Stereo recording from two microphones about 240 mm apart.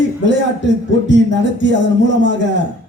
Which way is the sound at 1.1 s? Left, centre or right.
Left.